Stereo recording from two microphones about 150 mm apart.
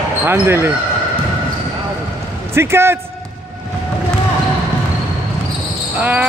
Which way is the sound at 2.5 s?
15° right (ahead or behind).